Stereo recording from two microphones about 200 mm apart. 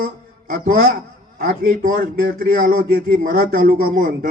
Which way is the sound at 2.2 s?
45° right (ahead or behind).